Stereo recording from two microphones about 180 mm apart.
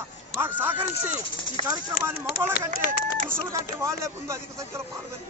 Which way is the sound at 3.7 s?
15° right (ahead or behind).